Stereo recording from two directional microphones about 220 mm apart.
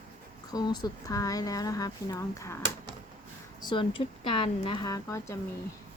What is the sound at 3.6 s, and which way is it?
Speech, 20° left (ahead or behind).